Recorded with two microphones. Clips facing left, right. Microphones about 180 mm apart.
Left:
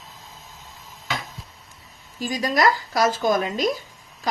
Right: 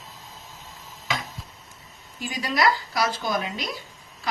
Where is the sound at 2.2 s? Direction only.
40° left (ahead or behind).